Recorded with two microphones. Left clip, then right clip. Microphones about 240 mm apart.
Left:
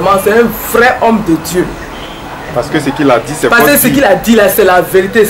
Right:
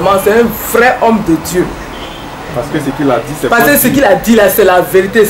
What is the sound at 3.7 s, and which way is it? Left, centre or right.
Speech, centre.